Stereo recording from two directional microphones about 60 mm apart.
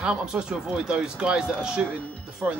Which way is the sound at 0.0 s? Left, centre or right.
Centre.